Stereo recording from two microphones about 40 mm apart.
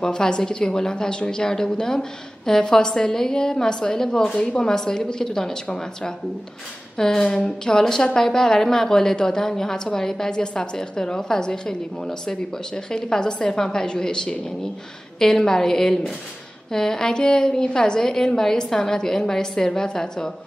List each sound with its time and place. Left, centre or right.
0.0 s a woman's voice: centre